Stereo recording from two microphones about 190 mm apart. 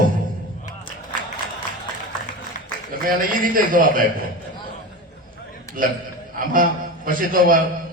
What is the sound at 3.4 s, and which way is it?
Speech, 45° right (ahead or behind).